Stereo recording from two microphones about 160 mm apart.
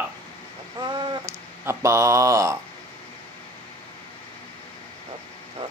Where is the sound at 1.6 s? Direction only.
15° right (ahead or behind).